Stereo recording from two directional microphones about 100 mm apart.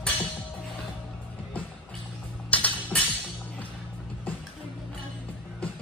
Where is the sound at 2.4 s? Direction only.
15° left (ahead or behind).